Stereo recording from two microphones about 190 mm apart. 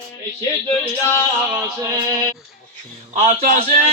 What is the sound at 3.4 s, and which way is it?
Speech, 45° right (ahead or behind).